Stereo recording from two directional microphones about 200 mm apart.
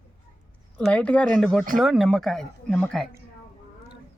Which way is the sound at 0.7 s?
5° left (ahead or behind).